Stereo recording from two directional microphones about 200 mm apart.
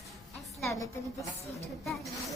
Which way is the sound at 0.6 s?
15° left (ahead or behind).